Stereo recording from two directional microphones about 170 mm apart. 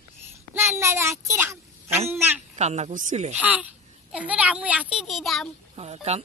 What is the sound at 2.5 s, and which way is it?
Speech, 40° right (ahead or behind).